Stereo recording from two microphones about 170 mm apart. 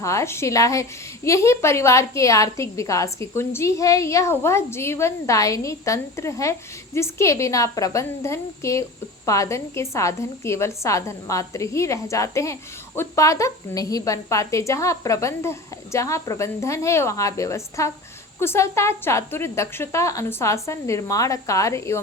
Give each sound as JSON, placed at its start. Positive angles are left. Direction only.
{"t": 0.0, "sound": "a woman's voice", "side_deg": 15}